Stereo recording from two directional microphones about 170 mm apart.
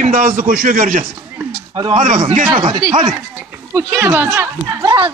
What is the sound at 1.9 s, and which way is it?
Speech, 45° right (ahead or behind).